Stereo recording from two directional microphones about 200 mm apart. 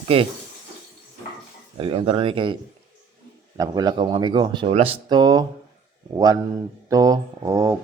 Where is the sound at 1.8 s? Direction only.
30° right (ahead or behind).